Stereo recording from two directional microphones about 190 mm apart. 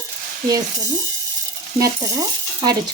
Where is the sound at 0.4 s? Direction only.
20° right (ahead or behind).